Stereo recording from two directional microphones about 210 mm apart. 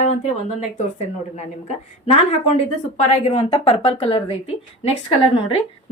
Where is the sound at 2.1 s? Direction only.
30° left (ahead or behind).